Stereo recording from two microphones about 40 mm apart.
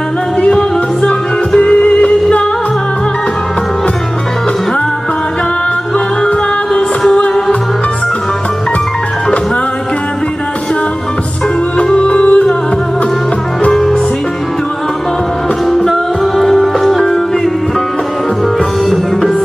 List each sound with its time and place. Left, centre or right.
0.4 s music: left
11.8 s music: left
15.8 s music: centre